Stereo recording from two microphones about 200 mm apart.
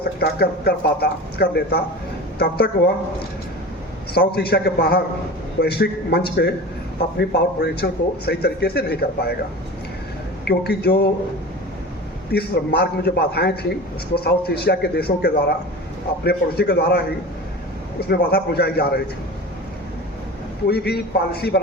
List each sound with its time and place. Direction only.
0.2 s a man's voice: 55° left (ahead or behind)
4.1 s a man's voice: 50° left (ahead or behind)
10.4 s a man's voice: 55° left (ahead or behind)
12.3 s a man's voice: 50° left (ahead or behind)
18.1 s a man's voice: 50° left (ahead or behind)
20.7 s a man's voice: 55° left (ahead or behind)